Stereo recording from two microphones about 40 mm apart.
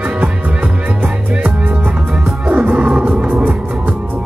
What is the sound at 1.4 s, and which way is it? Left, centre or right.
Music, right.